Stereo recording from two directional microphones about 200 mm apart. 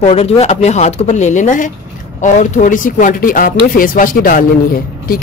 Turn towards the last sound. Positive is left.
turn(degrees=45)  # may be behind; listen again after turning